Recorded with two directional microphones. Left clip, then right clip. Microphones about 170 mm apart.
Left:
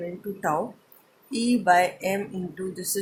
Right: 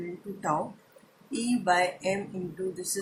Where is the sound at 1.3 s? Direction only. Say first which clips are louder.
Left 6 dB; 50° left (ahead or behind).